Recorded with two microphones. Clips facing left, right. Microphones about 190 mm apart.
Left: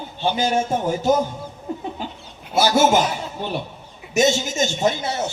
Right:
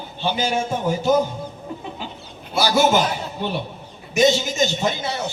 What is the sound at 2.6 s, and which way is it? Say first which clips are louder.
Speech: left 1 dB; 45° left (ahead or behind).